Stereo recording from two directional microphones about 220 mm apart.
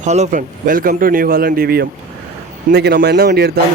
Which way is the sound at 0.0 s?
30° right (ahead or behind).